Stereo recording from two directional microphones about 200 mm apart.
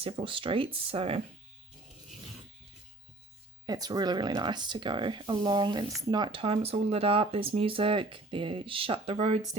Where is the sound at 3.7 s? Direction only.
20° right (ahead or behind).